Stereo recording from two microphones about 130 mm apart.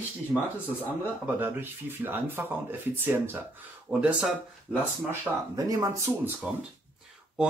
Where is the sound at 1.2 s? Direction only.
15° right (ahead or behind).